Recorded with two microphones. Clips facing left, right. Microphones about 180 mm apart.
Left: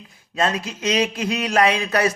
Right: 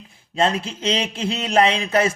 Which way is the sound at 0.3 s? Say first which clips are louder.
Right 2 dB; 30° right (ahead or behind).